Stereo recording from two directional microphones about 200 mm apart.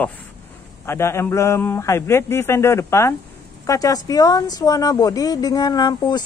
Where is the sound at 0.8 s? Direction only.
15° left (ahead or behind).